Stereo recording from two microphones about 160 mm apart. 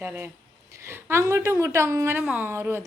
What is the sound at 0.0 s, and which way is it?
A woman's voice, 15° right (ahead or behind).